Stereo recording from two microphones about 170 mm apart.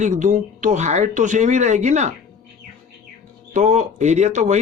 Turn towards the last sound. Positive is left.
turn(degrees=-45)  # may be behind; listen again after turning